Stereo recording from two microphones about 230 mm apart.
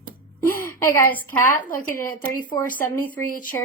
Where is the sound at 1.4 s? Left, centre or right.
Left.